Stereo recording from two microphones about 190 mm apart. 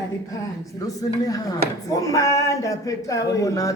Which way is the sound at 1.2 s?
20° left (ahead or behind).